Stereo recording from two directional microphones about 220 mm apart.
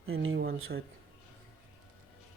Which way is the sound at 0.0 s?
65° right (ahead or behind).